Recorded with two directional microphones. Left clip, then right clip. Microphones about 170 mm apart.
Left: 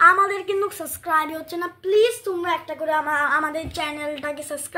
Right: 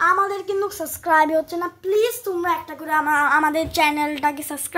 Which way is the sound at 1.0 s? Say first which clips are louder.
Right 6 dB; 50° right (ahead or behind).